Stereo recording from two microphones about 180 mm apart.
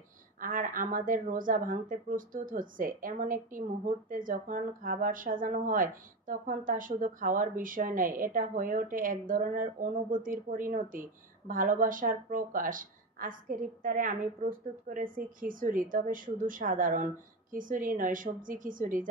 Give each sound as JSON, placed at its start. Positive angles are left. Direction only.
{"t": 0.4, "sound": "speech", "side_deg": -50}